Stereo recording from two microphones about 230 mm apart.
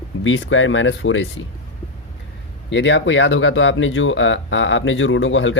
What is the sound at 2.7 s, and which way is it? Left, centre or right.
Speech, left.